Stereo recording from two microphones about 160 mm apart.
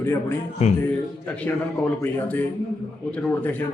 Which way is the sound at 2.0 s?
10° left (ahead or behind).